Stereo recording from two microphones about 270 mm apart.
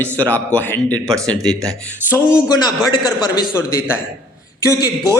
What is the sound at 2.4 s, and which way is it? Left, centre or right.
A man's voice, centre.